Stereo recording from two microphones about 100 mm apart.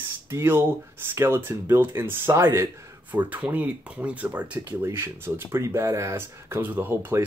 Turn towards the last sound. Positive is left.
turn(degrees=-20)  # may be behind; listen again after turning